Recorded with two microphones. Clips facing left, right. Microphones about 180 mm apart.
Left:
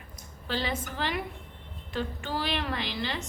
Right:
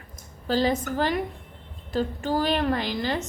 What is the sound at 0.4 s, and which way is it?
A woman's voice, 40° right (ahead or behind).